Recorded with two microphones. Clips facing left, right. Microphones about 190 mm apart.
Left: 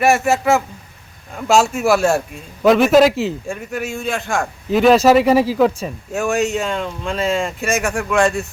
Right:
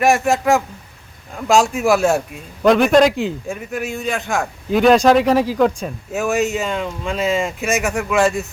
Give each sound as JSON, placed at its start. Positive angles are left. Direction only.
{"t": 0.0, "sound": "a man's voice", "side_deg": 0}